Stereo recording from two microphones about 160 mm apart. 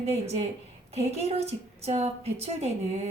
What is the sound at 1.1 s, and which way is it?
A woman's voice, 40° right (ahead or behind).